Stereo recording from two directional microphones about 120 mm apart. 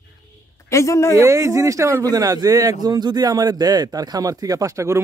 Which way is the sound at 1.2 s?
25° right (ahead or behind).